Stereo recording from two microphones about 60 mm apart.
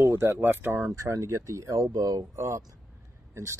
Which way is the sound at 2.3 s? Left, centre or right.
Right.